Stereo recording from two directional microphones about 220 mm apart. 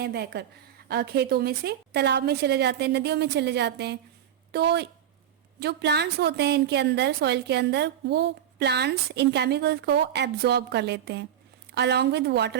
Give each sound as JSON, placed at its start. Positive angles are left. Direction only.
{"t": 0.0, "sound": "a woman's voice", "side_deg": -45}